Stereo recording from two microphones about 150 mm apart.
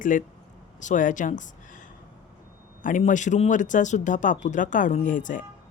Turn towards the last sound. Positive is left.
turn(degrees=60)  # may be behind; listen again after turning